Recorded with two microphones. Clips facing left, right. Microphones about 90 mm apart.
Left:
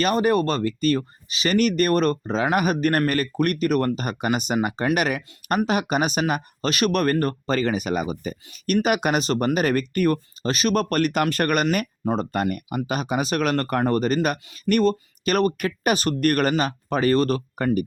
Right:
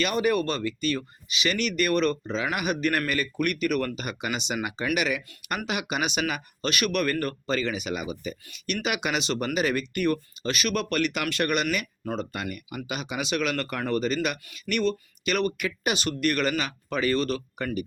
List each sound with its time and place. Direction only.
0.0 s speech: 40° left (ahead or behind)